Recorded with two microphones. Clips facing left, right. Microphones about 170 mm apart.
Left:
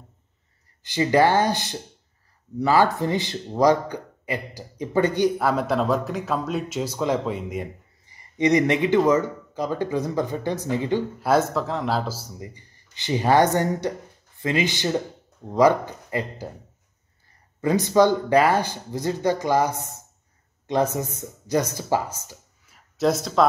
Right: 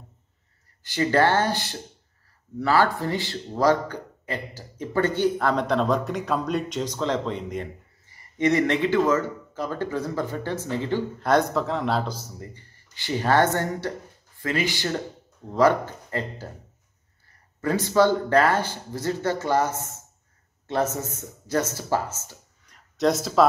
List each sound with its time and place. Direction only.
0.8 s a man's voice: 15° left (ahead or behind)
11.2 s a man's voice: 5° left (ahead or behind)
17.6 s a man's voice: 15° left (ahead or behind)
22.9 s speech: centre (ahead or behind)